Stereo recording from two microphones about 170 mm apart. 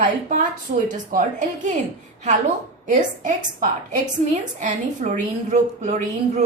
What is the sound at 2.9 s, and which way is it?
A woman's voice, 50° right (ahead or behind).